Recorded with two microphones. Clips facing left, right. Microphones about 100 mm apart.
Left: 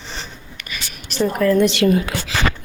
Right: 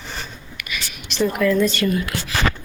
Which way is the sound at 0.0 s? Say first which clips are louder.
Even; 30° left (ahead or behind).